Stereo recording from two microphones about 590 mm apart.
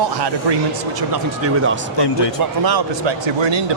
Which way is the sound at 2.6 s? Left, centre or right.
Right.